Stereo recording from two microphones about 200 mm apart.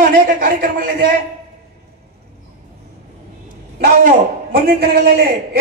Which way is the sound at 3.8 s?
45° right (ahead or behind).